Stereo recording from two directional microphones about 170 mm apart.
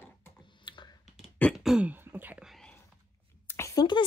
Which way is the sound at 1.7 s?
10° right (ahead or behind).